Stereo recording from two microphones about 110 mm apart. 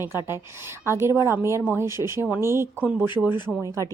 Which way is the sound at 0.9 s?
25° right (ahead or behind).